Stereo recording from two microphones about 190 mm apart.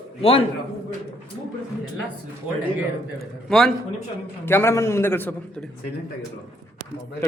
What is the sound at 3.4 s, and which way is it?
A man's voice, 5° left (ahead or behind).